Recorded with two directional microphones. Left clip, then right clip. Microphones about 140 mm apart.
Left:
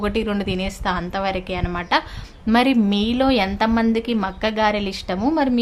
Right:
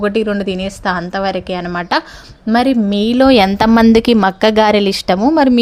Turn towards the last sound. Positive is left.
turn(degrees=-65)  # may be behind; listen again after turning